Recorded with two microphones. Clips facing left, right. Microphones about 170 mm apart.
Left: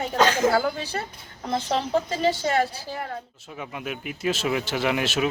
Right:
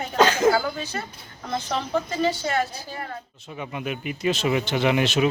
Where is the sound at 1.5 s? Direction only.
30° left (ahead or behind).